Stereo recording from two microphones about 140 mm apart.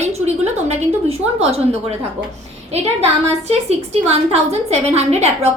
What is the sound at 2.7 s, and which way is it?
A woman's voice, 50° right (ahead or behind).